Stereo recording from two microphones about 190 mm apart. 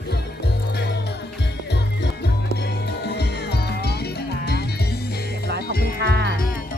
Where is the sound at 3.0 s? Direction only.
60° left (ahead or behind).